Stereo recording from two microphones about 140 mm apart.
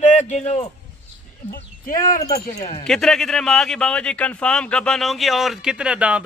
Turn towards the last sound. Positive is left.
turn(degrees=-10)  # may be behind; listen again after turning